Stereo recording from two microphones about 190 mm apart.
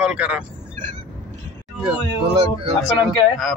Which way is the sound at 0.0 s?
5° right (ahead or behind).